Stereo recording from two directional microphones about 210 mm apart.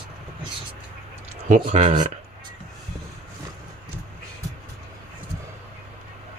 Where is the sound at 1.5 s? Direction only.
35° right (ahead or behind).